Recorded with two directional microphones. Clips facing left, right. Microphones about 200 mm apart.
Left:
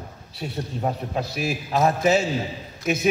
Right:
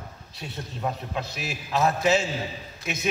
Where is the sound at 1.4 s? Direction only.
50° left (ahead or behind).